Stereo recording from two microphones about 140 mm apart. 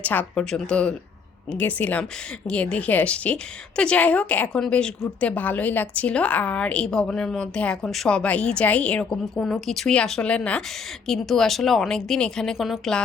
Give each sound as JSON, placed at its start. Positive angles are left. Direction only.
{"t": 0.0, "sound": "a woman's voice", "side_deg": 10}